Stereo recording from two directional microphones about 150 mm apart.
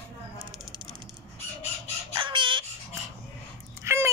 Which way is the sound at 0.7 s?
30° right (ahead or behind).